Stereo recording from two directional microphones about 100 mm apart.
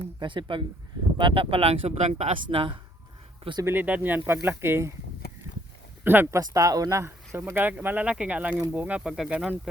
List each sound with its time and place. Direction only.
0.2 s speech: 55° right (ahead or behind); by 2.7 s 70° right (ahead or behind)
3.6 s speech: 20° right (ahead or behind)
6.1 s speech: 20° right (ahead or behind)
6.4 s speech: 35° right (ahead or behind)
7.3 s speech: 20° right (ahead or behind); by 9.5 s 5° right (ahead or behind)